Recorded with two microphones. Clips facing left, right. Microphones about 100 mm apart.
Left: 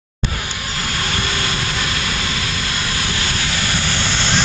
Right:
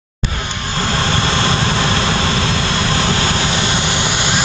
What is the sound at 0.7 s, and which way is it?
Vehicle, 30° right (ahead or behind).